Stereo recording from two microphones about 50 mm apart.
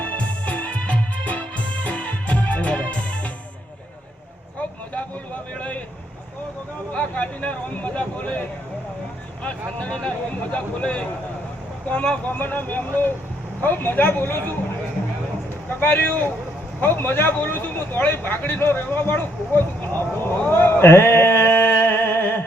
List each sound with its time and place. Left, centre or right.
0.0 s music: left
5.5 s vehicle: left
6.9 s a sound: left
9.9 s vehicle: centre
10.5 s speech: left
12.4 s speech: left
15.8 s speech: left
20.5 s a sound: left